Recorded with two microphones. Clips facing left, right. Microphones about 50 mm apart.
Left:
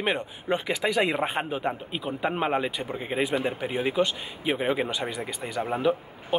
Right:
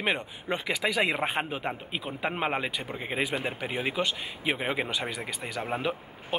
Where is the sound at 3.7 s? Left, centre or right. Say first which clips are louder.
Left 3 dB; right.